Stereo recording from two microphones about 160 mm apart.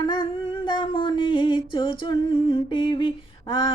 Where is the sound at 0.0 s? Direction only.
30° left (ahead or behind).